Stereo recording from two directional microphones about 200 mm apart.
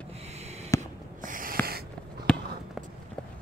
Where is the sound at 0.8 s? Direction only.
40° right (ahead or behind).